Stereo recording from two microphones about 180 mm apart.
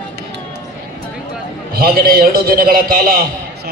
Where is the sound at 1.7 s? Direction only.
55° right (ahead or behind).